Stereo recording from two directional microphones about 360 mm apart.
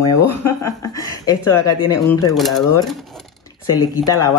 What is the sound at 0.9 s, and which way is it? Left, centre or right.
Speech, centre.